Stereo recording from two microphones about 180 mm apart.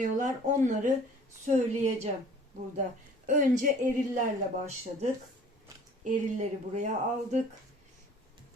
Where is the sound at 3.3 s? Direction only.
45° right (ahead or behind).